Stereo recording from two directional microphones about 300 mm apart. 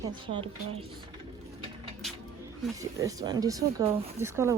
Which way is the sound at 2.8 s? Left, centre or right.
Centre.